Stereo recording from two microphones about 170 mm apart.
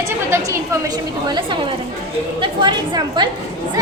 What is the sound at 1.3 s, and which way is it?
A woman's voice, 30° right (ahead or behind).